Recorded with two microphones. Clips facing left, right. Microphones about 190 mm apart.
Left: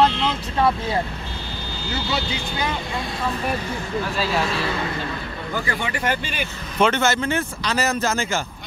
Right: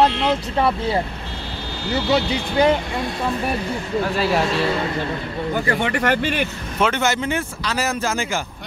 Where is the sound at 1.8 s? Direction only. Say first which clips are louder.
Right 7 dB; 65° right (ahead or behind).